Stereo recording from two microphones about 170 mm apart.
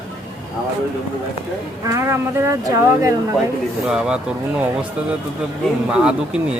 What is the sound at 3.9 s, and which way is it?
Speech, 5° right (ahead or behind).